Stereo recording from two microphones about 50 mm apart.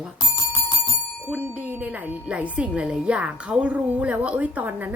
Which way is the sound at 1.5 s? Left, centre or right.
Right.